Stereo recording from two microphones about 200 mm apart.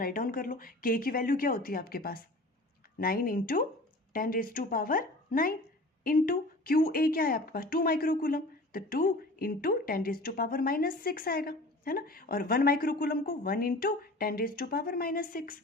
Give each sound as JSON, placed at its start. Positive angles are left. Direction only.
{"t": 0.0, "sound": "a woman's voice", "side_deg": 45}